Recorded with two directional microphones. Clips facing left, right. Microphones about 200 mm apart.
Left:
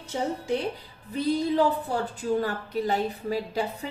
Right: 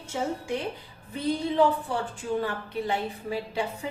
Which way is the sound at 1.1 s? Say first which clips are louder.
Left 1 dB; 40° left (ahead or behind).